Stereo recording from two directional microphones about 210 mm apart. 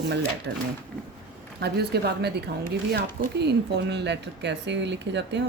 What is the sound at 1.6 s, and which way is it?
A woman's voice, 50° right (ahead or behind).